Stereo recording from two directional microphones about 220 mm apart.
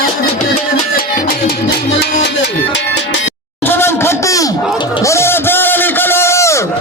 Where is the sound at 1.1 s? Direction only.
45° left (ahead or behind).